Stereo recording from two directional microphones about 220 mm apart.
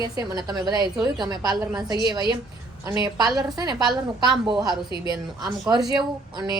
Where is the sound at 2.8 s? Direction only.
15° right (ahead or behind).